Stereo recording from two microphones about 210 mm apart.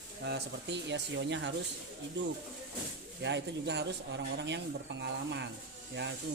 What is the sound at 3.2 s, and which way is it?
Speech, 55° right (ahead or behind).